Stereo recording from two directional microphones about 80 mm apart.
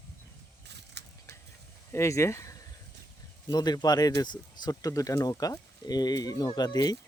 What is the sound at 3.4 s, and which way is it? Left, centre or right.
Speech, left.